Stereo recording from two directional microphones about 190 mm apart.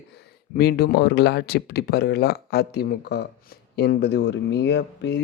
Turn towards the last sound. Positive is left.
turn(degrees=65)  # may be behind; listen again after turning